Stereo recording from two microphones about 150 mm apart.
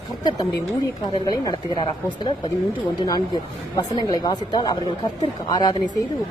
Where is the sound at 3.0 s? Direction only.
25° left (ahead or behind).